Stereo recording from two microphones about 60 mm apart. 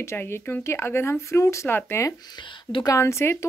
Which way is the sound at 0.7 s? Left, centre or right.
Left.